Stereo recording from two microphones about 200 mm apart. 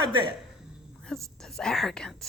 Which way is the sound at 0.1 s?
25° right (ahead or behind).